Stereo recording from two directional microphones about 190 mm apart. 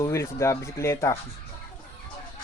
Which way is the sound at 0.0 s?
15° left (ahead or behind).